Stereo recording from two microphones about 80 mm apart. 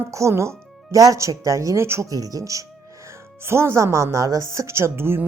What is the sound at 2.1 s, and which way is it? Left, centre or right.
Speech, right.